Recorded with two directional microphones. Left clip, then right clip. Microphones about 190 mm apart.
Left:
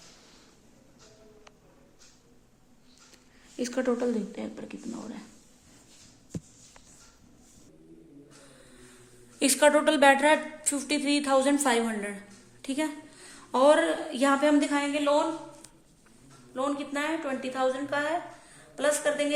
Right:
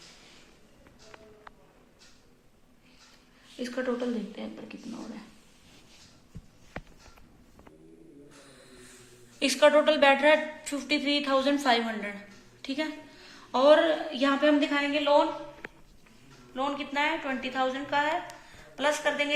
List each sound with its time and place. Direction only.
3.6 s a woman's voice: 55° left (ahead or behind)
9.4 s a woman's voice: 60° left (ahead or behind)
16.6 s a woman's voice: 65° left (ahead or behind)